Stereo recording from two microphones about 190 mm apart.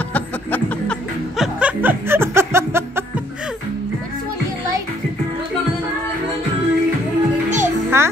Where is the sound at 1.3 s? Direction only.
5° right (ahead or behind).